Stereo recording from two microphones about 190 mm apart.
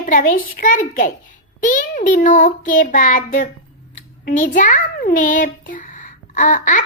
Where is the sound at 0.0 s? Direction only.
45° left (ahead or behind).